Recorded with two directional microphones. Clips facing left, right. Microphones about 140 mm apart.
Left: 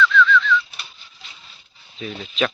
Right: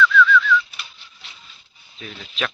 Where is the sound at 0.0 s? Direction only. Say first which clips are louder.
Right 1 dB; 10° right (ahead or behind).